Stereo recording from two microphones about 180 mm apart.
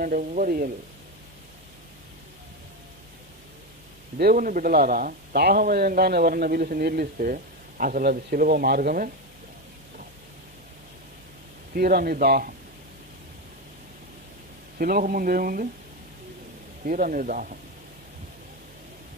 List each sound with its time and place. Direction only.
0.0 s speech: 50° right (ahead or behind)
4.2 s a man's voice: 50° right (ahead or behind)
11.7 s a man's voice: 55° right (ahead or behind)
14.8 s speech: 50° right (ahead or behind)
16.8 s speech: 50° right (ahead or behind)